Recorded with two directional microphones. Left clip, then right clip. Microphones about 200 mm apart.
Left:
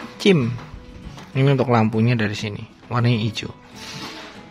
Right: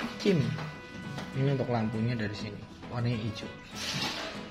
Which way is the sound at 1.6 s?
40° left (ahead or behind).